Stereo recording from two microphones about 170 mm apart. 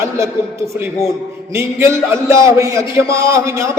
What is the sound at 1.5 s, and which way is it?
A man's voice, 15° right (ahead or behind).